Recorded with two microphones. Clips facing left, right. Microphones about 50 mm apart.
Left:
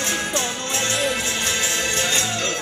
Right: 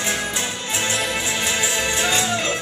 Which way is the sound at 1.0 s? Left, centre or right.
Centre.